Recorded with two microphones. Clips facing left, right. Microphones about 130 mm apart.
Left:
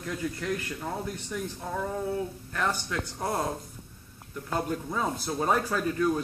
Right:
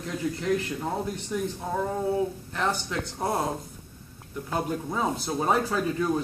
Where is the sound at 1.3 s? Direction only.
15° right (ahead or behind).